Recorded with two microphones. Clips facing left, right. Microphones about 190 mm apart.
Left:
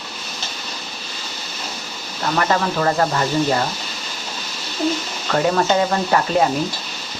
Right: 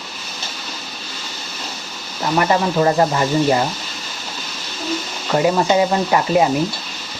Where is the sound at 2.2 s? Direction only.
15° right (ahead or behind).